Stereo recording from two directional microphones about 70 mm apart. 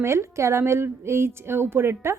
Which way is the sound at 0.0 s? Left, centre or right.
Right.